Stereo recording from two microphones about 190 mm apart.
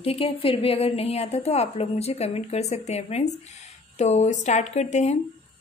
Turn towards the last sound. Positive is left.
turn(degrees=35)  # may be behind; listen again after turning